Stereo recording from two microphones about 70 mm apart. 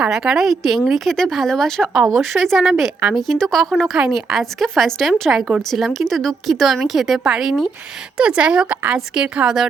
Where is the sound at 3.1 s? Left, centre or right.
Centre.